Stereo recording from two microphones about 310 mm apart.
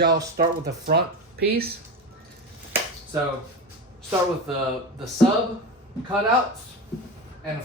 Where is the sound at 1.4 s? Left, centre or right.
Right.